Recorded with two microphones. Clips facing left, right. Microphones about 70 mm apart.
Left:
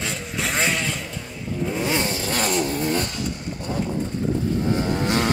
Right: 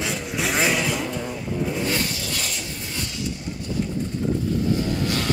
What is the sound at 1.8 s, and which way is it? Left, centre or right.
Vehicle, left.